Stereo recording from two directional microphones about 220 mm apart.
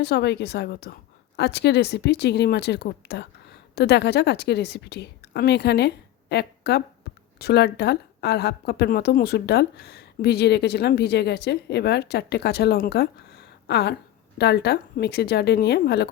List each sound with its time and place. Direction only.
0.0 s a woman's voice: 50° left (ahead or behind)